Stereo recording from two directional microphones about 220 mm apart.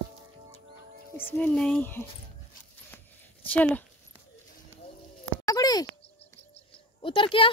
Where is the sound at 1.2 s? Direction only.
5° left (ahead or behind).